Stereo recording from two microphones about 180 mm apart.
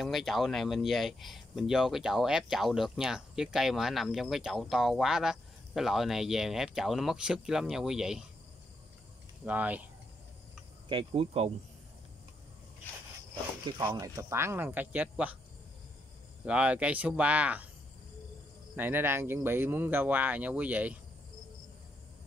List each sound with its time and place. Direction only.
0.0 s speech: centre (ahead or behind)
9.4 s speech: 10° right (ahead or behind)
10.9 s speech: 30° right (ahead or behind)
13.8 s speech: 20° right (ahead or behind)
16.4 s speech: 5° right (ahead or behind)
18.8 s speech: 10° right (ahead or behind)